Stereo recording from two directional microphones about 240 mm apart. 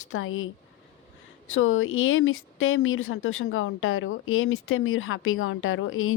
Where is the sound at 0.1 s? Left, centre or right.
Left.